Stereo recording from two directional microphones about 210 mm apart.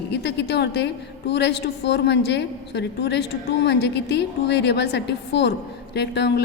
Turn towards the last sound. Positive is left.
turn(degrees=55)  # may be behind; listen again after turning